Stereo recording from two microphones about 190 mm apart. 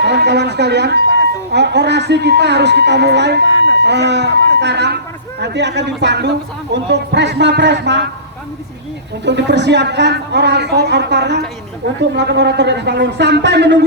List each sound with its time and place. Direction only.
0.0 s a sound: 65° right (ahead or behind)
1.5 s speech: 65° right (ahead or behind)
9.2 s speech: 65° right (ahead or behind)